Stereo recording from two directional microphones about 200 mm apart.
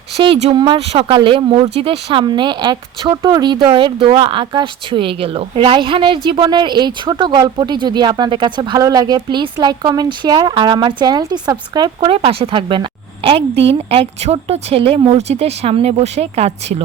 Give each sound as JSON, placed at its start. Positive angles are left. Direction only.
{"t": 0.2, "sound": "speech", "side_deg": -30}